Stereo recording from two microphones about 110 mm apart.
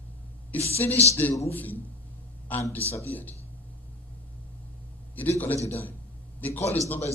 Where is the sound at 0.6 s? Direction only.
65° left (ahead or behind).